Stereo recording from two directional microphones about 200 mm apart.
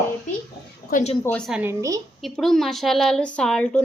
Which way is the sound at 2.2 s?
Centre (ahead or behind).